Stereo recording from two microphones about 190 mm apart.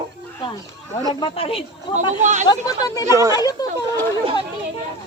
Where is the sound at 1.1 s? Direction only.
25° left (ahead or behind).